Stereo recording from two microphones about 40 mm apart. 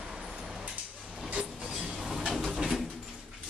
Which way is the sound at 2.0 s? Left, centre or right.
Centre.